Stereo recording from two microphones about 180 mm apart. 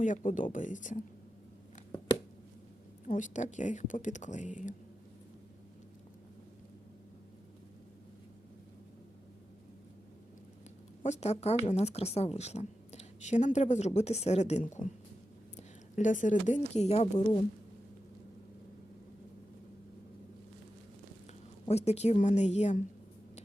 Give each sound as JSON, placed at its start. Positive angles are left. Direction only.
{"t": 0.0, "sound": "a woman's voice", "side_deg": 45}
{"t": 3.1, "sound": "a woman's voice", "side_deg": 45}
{"t": 11.0, "sound": "a woman's voice", "side_deg": 40}
{"t": 21.7, "sound": "a woman's voice", "side_deg": 35}